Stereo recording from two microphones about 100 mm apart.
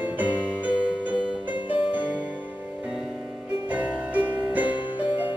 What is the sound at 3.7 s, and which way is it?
Music, 15° right (ahead or behind).